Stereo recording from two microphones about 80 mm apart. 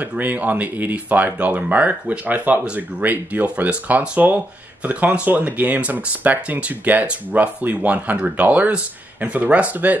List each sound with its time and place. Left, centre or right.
0.0 s speech: right